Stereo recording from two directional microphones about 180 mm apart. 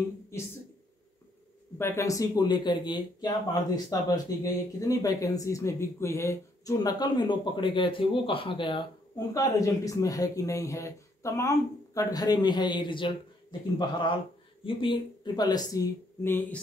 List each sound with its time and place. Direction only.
1.8 s speech: 15° left (ahead or behind)